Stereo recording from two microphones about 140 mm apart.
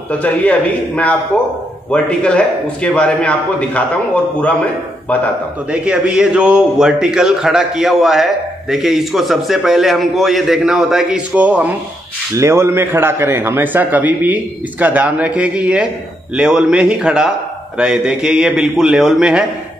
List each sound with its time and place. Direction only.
0.2 s a man's voice: 10° left (ahead or behind)
5.7 s a man's voice: 5° right (ahead or behind)